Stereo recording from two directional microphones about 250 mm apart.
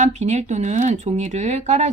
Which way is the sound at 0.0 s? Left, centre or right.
Right.